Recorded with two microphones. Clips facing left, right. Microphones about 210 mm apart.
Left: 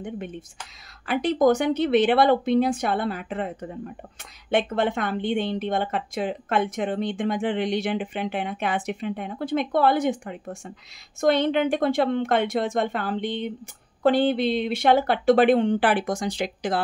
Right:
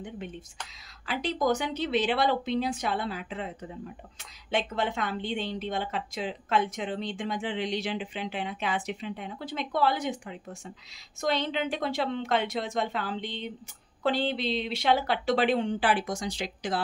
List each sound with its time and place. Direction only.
1.0 s a woman's voice: 55° left (ahead or behind)